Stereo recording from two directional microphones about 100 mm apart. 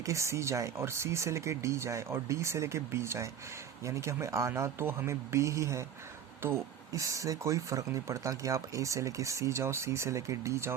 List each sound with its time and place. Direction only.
0.0 s speech: 30° right (ahead or behind)